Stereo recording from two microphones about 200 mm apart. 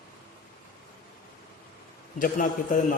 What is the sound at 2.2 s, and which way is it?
Speech, 45° left (ahead or behind).